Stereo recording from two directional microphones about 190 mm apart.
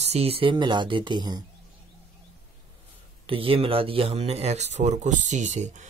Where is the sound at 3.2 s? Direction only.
30° right (ahead or behind).